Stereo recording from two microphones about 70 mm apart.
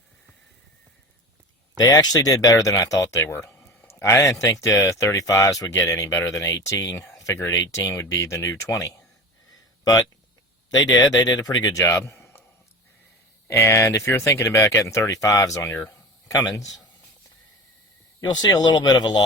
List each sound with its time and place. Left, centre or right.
1.8 s speech: left
7.1 s a sound: left
7.5 s speech: left
11.3 s speech: left
11.7 s a sound: left
13.5 s speech: left
16.3 s speech: left
18.2 s speech: left